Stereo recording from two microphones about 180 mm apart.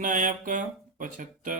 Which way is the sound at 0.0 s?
45° right (ahead or behind).